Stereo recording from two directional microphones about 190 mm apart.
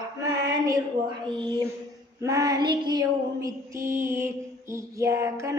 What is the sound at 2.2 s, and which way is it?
Female singing, 15° right (ahead or behind).